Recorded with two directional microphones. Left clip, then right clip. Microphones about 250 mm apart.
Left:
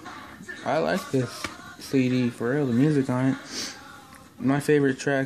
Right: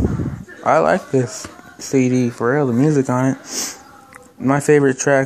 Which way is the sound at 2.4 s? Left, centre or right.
Centre.